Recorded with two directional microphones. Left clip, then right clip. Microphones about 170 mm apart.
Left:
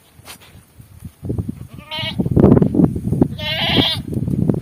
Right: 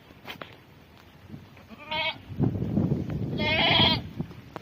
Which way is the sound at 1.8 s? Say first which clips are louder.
Left 4 dB; 20° left (ahead or behind).